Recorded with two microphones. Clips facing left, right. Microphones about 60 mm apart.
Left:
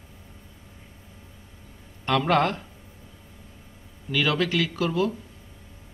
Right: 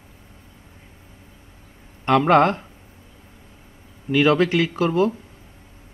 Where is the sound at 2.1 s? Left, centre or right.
Right.